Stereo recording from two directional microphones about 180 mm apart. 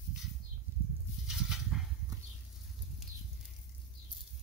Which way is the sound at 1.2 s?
Centre (ahead or behind).